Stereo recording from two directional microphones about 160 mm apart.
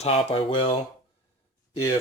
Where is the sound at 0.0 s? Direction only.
40° left (ahead or behind).